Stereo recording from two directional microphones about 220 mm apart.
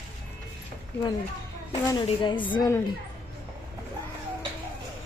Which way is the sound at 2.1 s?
20° left (ahead or behind).